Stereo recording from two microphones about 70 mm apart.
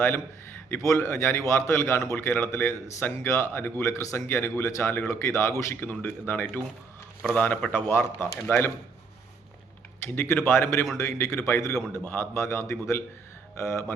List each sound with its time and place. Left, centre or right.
0.8 s speech: left
2.1 s speech: left
5.8 s speech: left
10.1 s a man's voice: left